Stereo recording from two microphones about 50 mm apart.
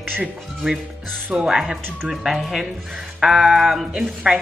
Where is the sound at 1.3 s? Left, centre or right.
Centre.